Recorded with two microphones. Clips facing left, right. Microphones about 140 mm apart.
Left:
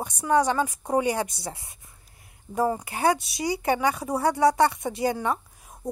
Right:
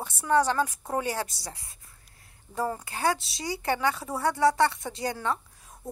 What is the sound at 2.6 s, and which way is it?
Speech, 15° left (ahead or behind).